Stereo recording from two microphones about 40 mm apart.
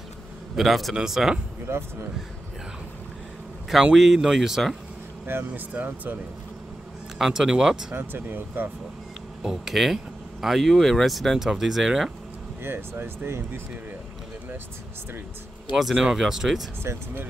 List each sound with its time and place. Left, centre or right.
0.6 s speech: centre
1.7 s speech: right
3.9 s speech: centre
5.2 s speech: right
5.5 s speech: right
7.2 s speech: centre
7.9 s speech: right
9.4 s speech: centre
12.6 s speech: right
15.7 s speech: centre
16.8 s speech: right